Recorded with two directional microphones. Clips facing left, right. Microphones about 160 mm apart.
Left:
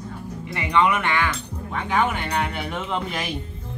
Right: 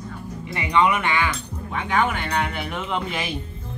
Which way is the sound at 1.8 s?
5° left (ahead or behind).